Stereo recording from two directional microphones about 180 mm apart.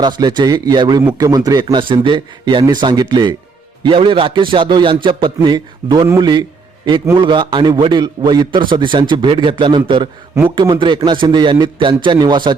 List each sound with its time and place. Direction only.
0.0 s a man's voice: 25° right (ahead or behind)